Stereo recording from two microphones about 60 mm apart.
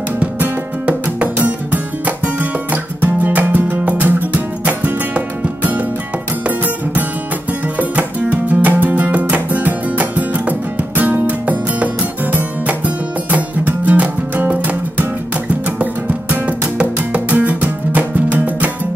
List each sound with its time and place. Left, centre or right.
0.8 s music: right